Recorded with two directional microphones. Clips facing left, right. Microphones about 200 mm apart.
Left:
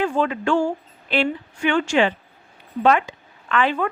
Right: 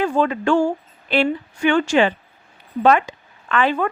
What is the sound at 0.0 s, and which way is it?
A woman's voice, 40° right (ahead or behind).